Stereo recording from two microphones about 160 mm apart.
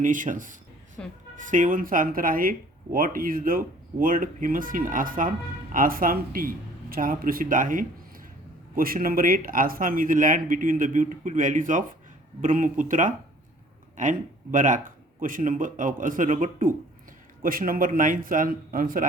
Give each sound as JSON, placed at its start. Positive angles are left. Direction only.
{"t": 0.0, "sound": "speech", "side_deg": -55}
{"t": 1.0, "sound": "a woman's voice", "side_deg": 5}
{"t": 1.4, "sound": "speech", "side_deg": -55}